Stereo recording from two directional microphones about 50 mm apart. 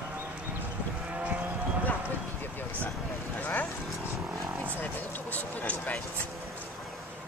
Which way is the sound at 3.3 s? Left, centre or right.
Left.